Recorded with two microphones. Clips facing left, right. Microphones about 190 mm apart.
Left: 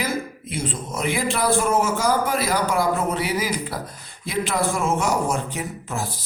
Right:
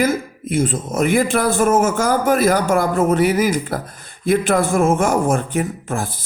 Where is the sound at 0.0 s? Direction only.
50° right (ahead or behind).